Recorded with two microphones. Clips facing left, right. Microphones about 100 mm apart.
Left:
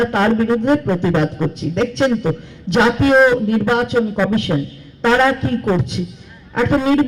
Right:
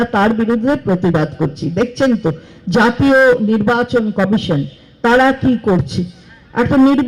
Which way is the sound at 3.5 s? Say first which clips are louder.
Right 2 dB; 15° right (ahead or behind).